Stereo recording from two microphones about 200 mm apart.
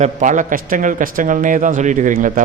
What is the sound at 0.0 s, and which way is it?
A man's voice, 40° right (ahead or behind).